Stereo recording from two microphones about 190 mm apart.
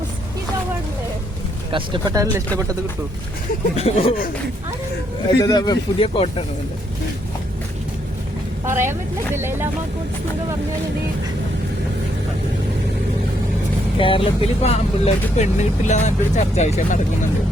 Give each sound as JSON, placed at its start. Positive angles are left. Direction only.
{"t": 1.7, "sound": "speech", "side_deg": -25}
{"t": 3.8, "sound": "speech", "side_deg": 30}
{"t": 5.4, "sound": "speech", "side_deg": 20}
{"t": 8.6, "sound": "speech", "side_deg": -15}
{"t": 14.0, "sound": "speech", "side_deg": 30}